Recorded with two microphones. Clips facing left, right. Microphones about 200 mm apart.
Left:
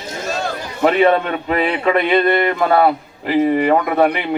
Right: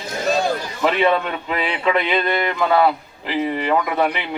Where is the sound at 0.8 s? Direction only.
50° left (ahead or behind).